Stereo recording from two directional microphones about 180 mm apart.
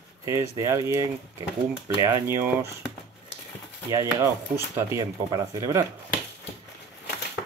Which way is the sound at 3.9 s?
15° right (ahead or behind).